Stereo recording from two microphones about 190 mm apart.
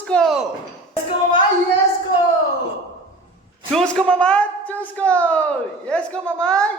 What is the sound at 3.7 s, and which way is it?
A woman's voice, 5° left (ahead or behind).